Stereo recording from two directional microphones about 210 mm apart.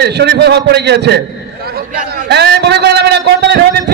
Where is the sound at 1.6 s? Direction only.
45° right (ahead or behind).